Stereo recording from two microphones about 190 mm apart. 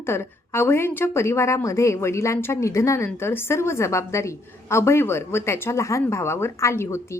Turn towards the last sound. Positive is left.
turn(degrees=15)  # may be behind; listen again after turning